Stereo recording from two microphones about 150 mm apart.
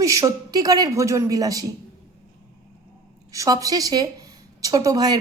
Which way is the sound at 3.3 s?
20° right (ahead or behind).